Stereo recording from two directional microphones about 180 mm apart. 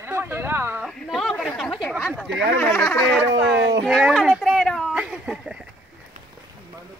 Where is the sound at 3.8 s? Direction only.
Centre (ahead or behind).